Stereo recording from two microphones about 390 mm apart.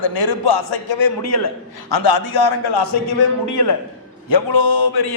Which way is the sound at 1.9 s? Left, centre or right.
Left.